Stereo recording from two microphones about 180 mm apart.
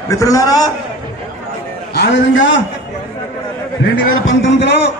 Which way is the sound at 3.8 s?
85° left.